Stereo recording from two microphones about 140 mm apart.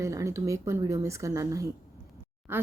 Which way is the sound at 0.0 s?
20° right (ahead or behind).